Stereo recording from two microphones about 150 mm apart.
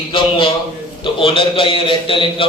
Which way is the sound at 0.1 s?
35° left (ahead or behind).